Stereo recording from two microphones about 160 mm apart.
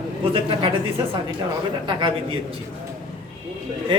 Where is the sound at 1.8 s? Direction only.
35° right (ahead or behind).